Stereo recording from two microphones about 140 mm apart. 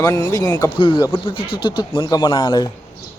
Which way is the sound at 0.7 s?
35° left (ahead or behind).